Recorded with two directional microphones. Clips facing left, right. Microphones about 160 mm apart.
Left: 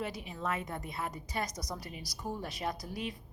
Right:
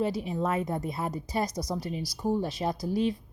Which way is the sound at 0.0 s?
35° right (ahead or behind).